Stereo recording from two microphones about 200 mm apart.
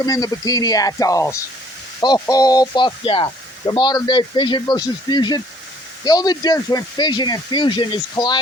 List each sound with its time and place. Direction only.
0.0 s speech: 20° left (ahead or behind)